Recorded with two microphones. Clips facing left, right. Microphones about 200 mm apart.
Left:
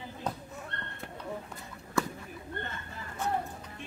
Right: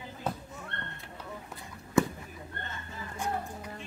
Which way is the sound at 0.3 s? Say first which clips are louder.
Right 2 dB; 5° right (ahead or behind).